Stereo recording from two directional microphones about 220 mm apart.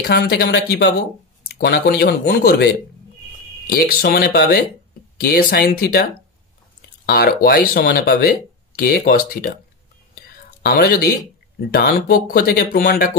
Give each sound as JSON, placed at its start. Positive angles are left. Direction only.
{"t": 0.0, "sound": "speech", "side_deg": 45}
{"t": 7.1, "sound": "speech", "side_deg": 45}
{"t": 10.2, "sound": "whispering", "side_deg": 45}
{"t": 11.7, "sound": "speech", "side_deg": 45}